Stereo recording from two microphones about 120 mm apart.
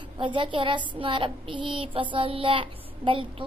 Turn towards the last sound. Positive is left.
turn(degrees=-45)  # may be behind; listen again after turning